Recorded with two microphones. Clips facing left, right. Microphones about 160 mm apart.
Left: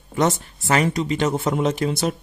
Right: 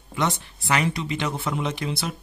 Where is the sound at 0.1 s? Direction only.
45° left (ahead or behind).